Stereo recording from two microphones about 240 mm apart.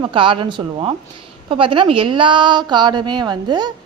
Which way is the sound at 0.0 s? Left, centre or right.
Right.